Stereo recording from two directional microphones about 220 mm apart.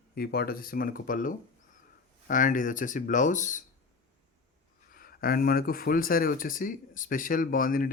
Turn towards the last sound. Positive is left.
turn(degrees=40)  # may be behind; listen again after turning